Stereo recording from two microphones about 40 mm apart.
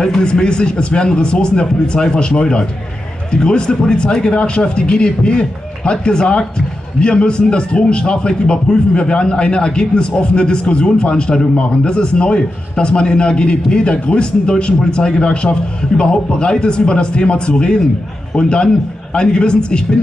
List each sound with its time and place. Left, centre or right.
0.0 s a man's voice: centre